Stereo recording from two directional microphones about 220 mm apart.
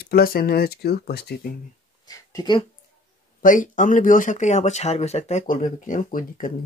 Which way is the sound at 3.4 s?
35° left (ahead or behind).